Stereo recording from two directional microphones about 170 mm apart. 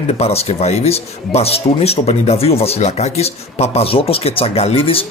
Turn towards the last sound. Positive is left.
turn(degrees=35)  # may be behind; listen again after turning